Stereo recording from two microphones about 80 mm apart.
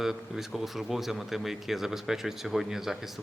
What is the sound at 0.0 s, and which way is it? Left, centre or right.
Speech, centre.